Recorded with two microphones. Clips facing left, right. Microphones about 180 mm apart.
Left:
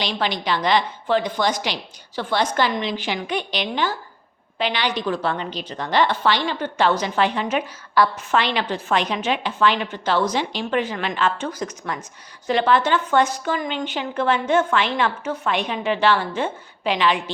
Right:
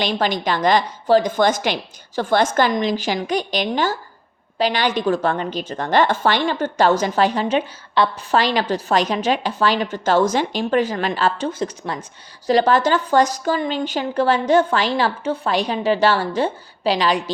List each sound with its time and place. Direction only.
0.0 s a woman's voice: 45° right (ahead or behind)